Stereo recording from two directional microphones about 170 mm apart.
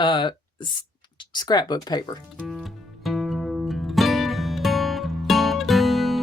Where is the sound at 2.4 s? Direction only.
Centre (ahead or behind).